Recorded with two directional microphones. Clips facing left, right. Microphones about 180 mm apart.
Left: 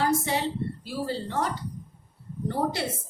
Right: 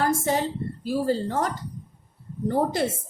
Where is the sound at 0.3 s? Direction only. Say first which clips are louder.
Right 4 dB; 45° right (ahead or behind).